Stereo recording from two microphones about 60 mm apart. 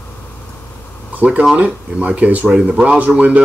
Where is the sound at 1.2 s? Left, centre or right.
Right.